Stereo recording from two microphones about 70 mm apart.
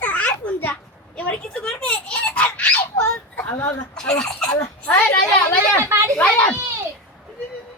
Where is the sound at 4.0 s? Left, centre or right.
Centre.